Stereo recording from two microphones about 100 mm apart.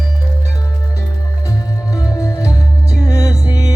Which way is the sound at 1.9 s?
35° left (ahead or behind).